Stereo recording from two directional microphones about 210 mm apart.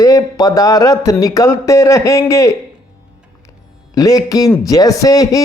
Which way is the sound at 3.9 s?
15° left (ahead or behind).